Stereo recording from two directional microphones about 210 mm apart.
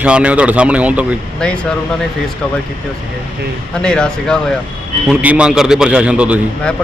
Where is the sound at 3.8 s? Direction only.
5° left (ahead or behind).